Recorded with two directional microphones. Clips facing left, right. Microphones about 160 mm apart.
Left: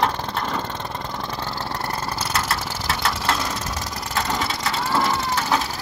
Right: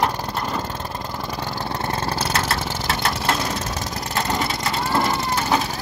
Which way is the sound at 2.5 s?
20° right (ahead or behind).